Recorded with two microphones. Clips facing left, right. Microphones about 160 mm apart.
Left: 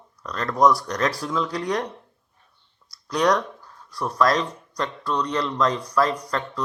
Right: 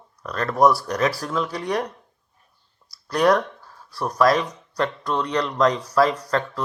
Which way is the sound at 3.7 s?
35° right (ahead or behind).